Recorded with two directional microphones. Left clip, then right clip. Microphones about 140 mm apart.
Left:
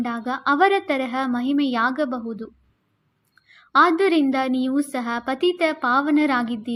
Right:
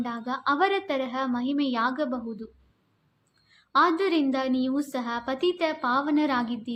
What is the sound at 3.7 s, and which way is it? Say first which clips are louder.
A woman's voice: left 6 dB; 45° left (ahead or behind).